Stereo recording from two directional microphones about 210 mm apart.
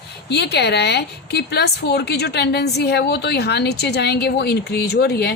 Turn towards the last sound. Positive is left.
turn(degrees=50)  # may be behind; listen again after turning